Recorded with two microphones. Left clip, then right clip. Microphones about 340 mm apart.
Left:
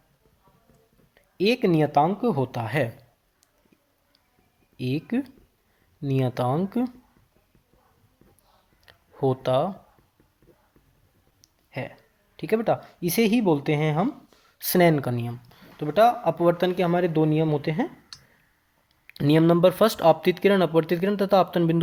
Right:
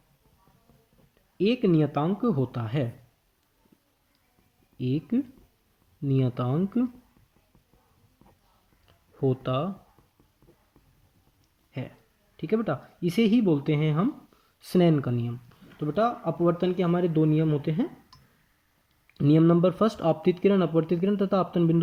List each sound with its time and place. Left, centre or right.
1.4 s speech: centre
4.8 s speech: centre
9.3 s speech: centre
12.4 s speech: left
19.1 s speech: left